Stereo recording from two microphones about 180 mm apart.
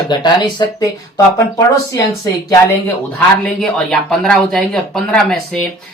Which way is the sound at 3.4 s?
Centre (ahead or behind).